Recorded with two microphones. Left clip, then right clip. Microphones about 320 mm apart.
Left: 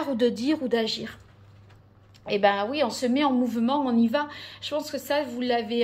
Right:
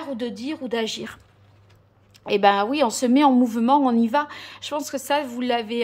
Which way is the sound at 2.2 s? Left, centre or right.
Centre.